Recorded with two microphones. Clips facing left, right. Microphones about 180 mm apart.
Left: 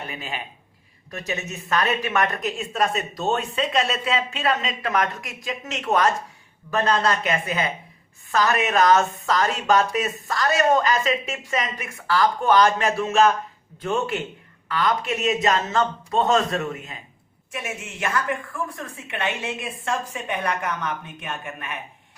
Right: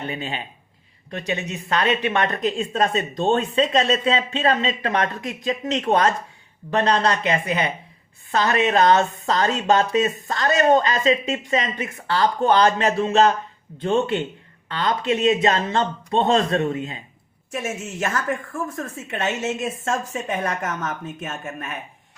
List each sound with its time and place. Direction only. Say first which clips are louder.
0.1 s speech: right 4 dB; 30° right (ahead or behind)
1.5 s speech: right 1 dB; 25° right (ahead or behind)
17.5 s a woman's voice: right 5 dB; 45° right (ahead or behind)